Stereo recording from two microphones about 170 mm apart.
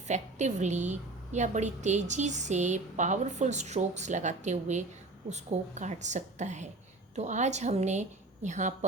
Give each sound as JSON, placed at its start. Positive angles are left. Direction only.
{"t": 0.1, "sound": "a woman's voice", "side_deg": -45}